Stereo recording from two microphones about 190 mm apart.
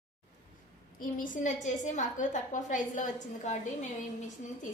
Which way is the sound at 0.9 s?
45° left (ahead or behind).